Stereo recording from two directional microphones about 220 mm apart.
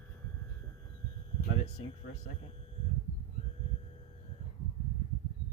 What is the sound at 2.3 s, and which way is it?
Speech, 25° left (ahead or behind).